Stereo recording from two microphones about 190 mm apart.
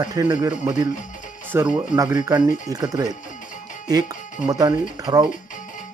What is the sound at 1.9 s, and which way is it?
Speech, 20° right (ahead or behind).